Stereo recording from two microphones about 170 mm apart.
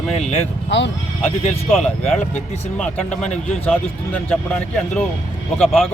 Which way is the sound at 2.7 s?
5° left (ahead or behind).